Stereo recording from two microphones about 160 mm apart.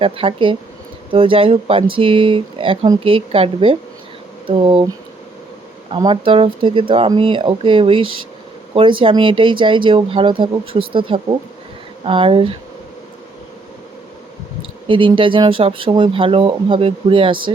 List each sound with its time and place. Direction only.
0.0 s speech: 35° right (ahead or behind)
5.9 s speech: 30° right (ahead or behind)
14.8 s speech: 35° right (ahead or behind)